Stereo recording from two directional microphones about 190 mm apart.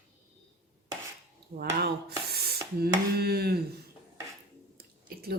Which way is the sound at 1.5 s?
55° right (ahead or behind).